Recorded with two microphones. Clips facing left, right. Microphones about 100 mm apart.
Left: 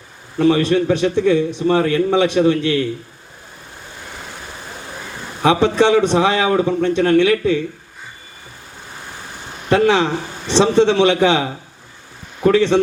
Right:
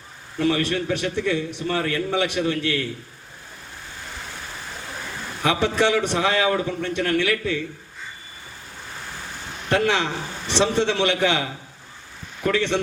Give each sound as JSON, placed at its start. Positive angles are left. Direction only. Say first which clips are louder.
{"t": 0.4, "sound": "a man's voice", "louder": "left 8 dB", "side_deg": 25}
{"t": 5.4, "sound": "a man's voice", "louder": "left 7 dB", "side_deg": 20}
{"t": 9.6, "sound": "a man's voice", "louder": "left 7 dB", "side_deg": 20}